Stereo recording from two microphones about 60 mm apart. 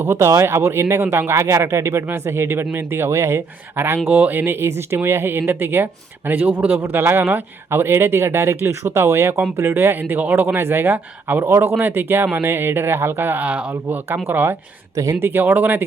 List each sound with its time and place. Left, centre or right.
0.0 s speech: right
1.3 s speech: right
3.1 s speech: right
13.4 s speech: right
14.3 s speech: right
14.9 s speech: right
15.2 s speech: right